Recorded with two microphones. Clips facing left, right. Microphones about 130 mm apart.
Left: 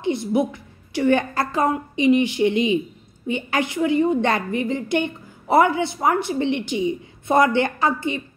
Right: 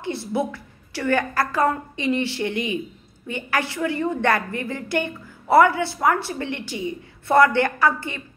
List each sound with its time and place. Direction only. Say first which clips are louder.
0.0 s a woman's voice: left 4 dB; 20° left (ahead or behind)